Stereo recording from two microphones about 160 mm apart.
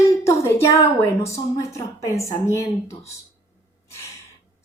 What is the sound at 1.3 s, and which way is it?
A woman's voice, 20° left (ahead or behind).